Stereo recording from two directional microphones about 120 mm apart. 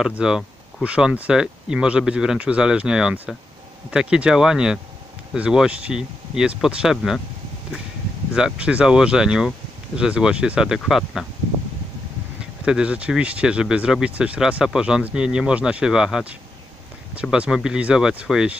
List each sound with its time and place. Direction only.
0.2 s speech: 5° right (ahead or behind)
8.4 s speech: 5° right (ahead or behind)
12.6 s speech: 10° right (ahead or behind)